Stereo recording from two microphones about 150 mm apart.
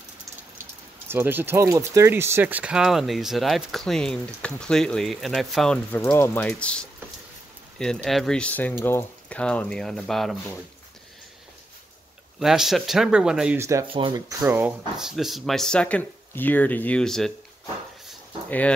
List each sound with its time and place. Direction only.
1.0 s speech: 15° right (ahead or behind); by 10.3 s centre (ahead or behind)
12.4 s speech: centre (ahead or behind)
13.6 s speech: 20° right (ahead or behind)
13.8 s speech: 35° right (ahead or behind)
14.4 s speech: 10° right (ahead or behind)